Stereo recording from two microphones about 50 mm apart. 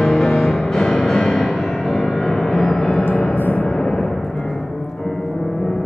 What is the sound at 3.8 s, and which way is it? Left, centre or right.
Timpani, centre.